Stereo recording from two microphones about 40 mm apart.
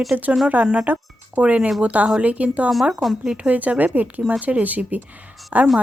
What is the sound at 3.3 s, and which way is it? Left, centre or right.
Speech, right.